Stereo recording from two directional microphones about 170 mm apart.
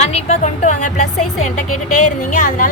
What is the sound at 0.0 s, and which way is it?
A woman's voice, 40° left (ahead or behind).